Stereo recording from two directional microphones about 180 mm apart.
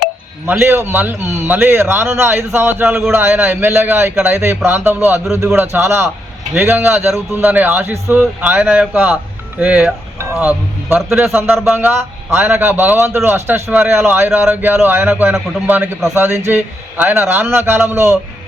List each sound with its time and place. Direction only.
0.4 s a man's voice: 10° right (ahead or behind)